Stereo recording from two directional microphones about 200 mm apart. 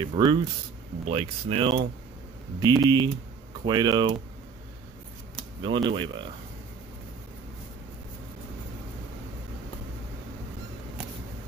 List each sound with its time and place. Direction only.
0.0 s speech: 20° right (ahead or behind)
5.6 s speech: 25° right (ahead or behind)